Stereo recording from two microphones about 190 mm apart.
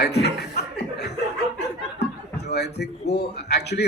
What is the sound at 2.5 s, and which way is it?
Speech, 60° left (ahead or behind).